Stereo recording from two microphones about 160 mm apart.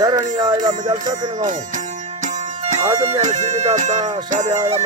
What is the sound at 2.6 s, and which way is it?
Speech, 45° right (ahead or behind).